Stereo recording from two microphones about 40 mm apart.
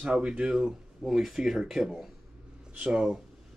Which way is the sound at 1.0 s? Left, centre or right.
Centre.